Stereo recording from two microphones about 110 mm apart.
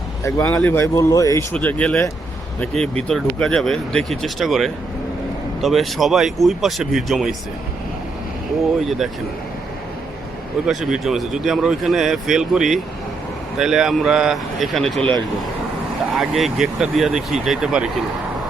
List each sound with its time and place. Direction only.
0.3 s a man's voice: 25° left (ahead or behind)
1.5 s speech: 10° left (ahead or behind)
10.7 s speech: 5° right (ahead or behind)
16.1 s speech: centre (ahead or behind)